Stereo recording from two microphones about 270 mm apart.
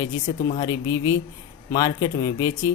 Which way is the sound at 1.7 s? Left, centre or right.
Centre.